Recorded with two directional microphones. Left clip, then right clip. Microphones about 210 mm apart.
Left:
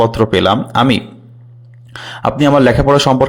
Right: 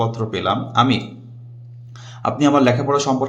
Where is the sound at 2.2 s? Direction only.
40° left (ahead or behind).